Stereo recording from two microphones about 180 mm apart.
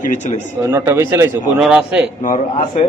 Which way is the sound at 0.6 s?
15° right (ahead or behind).